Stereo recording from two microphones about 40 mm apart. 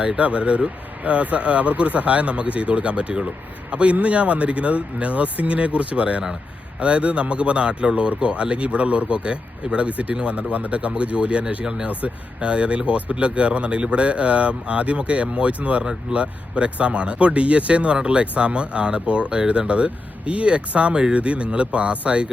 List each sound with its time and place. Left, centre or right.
0.2 s speech: right